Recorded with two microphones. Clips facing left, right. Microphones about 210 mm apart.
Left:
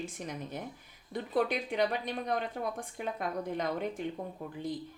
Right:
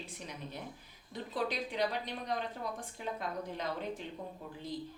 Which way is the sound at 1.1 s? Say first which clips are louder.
Left 6 dB; 55° left (ahead or behind).